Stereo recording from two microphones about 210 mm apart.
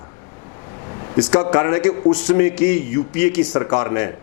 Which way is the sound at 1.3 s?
20° left (ahead or behind).